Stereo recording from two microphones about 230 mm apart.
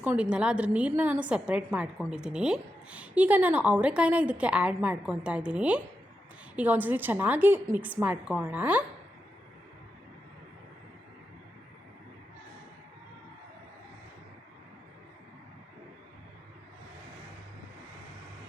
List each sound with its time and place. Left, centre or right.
0.0 s a woman's voice: centre